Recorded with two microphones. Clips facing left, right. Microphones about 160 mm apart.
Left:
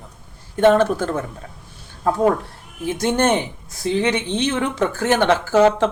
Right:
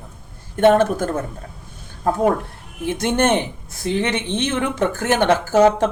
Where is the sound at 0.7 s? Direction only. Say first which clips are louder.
Even; 45° right (ahead or behind).